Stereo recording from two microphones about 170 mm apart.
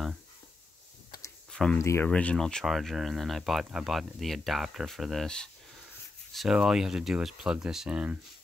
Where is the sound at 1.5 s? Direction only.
5° left (ahead or behind).